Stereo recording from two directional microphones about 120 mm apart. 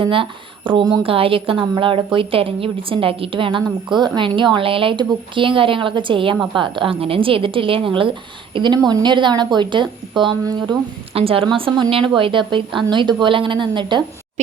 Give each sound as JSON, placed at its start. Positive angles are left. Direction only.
{"t": 0.0, "sound": "speech", "side_deg": -45}
{"t": 11.1, "sound": "speech", "side_deg": -50}